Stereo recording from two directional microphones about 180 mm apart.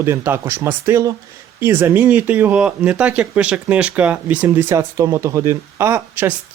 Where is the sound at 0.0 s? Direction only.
15° right (ahead or behind).